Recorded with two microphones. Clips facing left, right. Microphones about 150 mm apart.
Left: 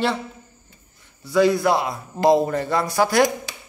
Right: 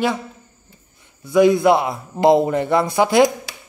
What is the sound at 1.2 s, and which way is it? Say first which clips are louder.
A man's voice: right 4 dB; 20° right (ahead or behind).